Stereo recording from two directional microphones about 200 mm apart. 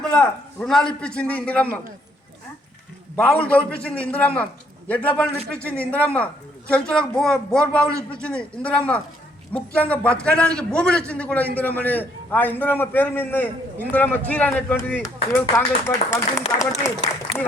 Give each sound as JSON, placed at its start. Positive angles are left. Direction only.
{"t": 0.0, "sound": "a man's voice", "side_deg": 5}
{"t": 3.2, "sound": "a man's voice", "side_deg": 5}